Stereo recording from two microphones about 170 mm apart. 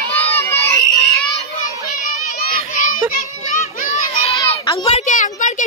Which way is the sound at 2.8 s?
55° left (ahead or behind).